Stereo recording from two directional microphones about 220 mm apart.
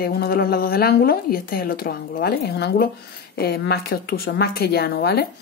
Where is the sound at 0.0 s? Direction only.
45° left (ahead or behind).